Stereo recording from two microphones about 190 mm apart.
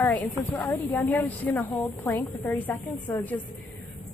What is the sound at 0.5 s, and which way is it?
A woman's voice, 10° left (ahead or behind).